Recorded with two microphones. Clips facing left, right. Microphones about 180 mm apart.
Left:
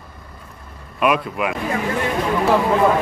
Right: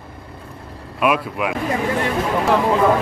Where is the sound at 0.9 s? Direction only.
5° right (ahead or behind).